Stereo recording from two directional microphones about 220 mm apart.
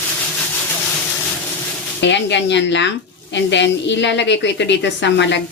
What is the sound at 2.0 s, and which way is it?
A woman's voice, 55° left (ahead or behind).